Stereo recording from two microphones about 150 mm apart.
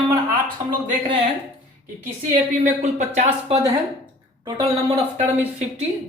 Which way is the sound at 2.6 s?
50° right (ahead or behind).